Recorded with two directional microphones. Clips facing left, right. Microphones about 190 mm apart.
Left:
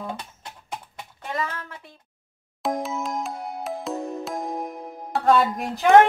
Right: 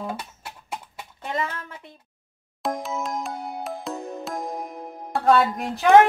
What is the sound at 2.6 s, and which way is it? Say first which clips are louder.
Music: left 1 dB; centre (ahead or behind).